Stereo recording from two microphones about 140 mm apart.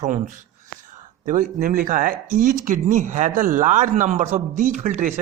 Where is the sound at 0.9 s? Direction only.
65° right (ahead or behind).